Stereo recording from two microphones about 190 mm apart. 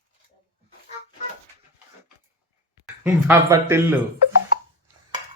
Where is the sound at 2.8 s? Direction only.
10° right (ahead or behind).